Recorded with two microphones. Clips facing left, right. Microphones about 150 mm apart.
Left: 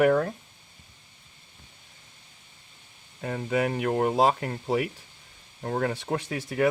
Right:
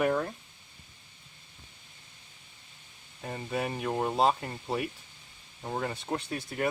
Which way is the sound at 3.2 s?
90° left.